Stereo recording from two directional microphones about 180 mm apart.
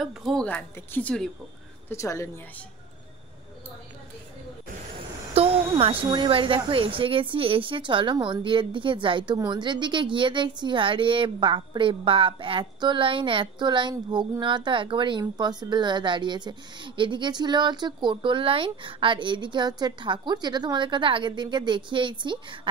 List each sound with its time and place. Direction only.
0.0 s speech: centre (ahead or behind)
1.9 s speech: 15° left (ahead or behind)
5.3 s a woman's voice: 35° right (ahead or behind)